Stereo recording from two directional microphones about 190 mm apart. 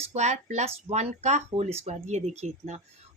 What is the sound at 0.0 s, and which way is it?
Speech, 35° right (ahead or behind).